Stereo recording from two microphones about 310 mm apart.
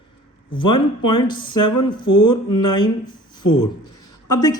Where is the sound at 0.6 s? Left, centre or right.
Centre.